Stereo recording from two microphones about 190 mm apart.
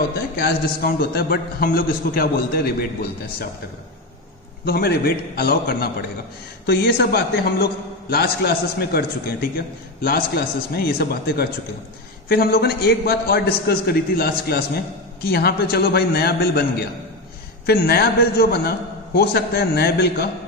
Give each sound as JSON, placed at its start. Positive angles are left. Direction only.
{"t": 0.4, "sound": "a man's voice", "side_deg": 55}
{"t": 4.6, "sound": "a man's voice", "side_deg": 55}
{"t": 10.0, "sound": "a man's voice", "side_deg": 55}
{"t": 17.6, "sound": "a man's voice", "side_deg": 55}